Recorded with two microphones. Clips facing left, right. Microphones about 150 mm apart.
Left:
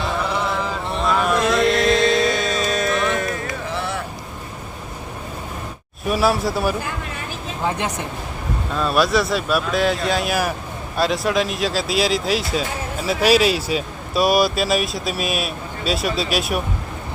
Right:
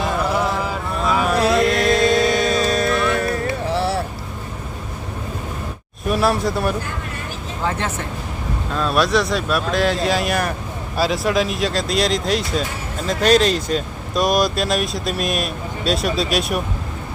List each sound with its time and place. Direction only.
0.3 s a sound: 10° right (ahead or behind)
1.5 s music: centre (ahead or behind)
3.2 s a sound: 35° right (ahead or behind)
6.1 s speech: centre (ahead or behind)
7.6 s speech: 15° left (ahead or behind)
8.7 s speech: centre (ahead or behind)